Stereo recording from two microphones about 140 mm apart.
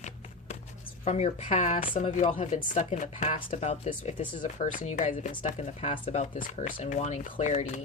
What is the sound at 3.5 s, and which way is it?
Speech, 50° left (ahead or behind).